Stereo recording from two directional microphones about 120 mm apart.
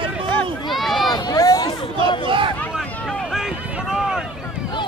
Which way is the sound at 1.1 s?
35° left (ahead or behind).